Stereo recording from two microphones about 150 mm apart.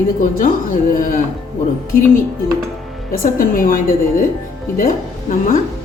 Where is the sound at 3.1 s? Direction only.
65° left (ahead or behind).